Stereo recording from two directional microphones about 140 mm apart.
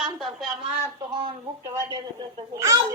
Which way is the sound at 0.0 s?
Centre (ahead or behind).